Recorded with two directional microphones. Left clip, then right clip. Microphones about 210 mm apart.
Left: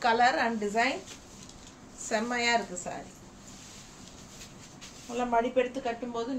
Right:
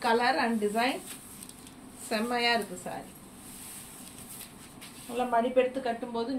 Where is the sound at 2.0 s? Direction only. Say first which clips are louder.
Even; 20° left (ahead or behind).